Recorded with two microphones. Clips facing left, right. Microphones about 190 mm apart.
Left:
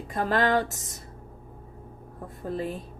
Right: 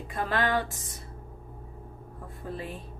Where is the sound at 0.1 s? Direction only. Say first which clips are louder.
Left 4 dB; 40° left (ahead or behind).